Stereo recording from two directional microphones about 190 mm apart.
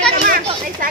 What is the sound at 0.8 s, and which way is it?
Speech, 45° right (ahead or behind).